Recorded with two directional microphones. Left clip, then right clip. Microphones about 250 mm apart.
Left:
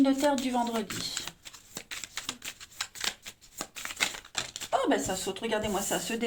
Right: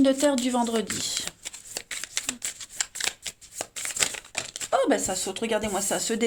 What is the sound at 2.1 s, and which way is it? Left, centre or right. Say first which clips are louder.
Shuffling cards: right 8 dB; right.